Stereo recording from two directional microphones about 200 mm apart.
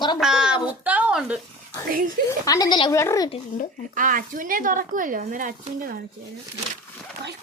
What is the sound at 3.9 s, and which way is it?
Speech, 40° right (ahead or behind).